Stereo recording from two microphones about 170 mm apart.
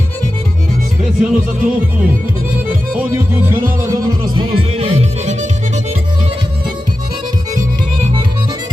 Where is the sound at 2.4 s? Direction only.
10° right (ahead or behind); by 6.0 s 40° right (ahead or behind).